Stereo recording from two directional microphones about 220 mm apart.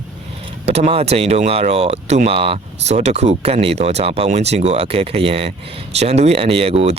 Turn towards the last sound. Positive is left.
turn(degrees=-25)  # may be behind; listen again after turning